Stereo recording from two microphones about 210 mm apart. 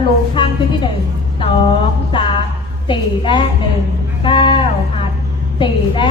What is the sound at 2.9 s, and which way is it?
Speech, 25° left (ahead or behind).